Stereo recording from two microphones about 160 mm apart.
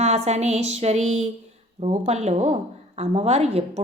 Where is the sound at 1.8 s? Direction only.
40° right (ahead or behind).